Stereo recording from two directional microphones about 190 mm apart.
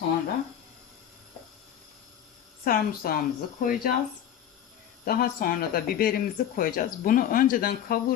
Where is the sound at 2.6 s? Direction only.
50° left (ahead or behind).